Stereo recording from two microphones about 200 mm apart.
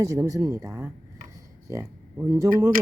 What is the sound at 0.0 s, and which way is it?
Speech, 15° right (ahead or behind).